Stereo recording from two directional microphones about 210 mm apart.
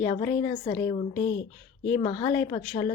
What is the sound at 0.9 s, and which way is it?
Speech, 35° left (ahead or behind).